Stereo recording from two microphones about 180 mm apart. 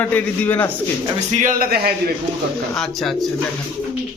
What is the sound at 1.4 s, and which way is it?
Speech, 50° right (ahead or behind).